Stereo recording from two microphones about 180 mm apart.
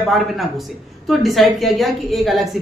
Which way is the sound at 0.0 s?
Centre (ahead or behind).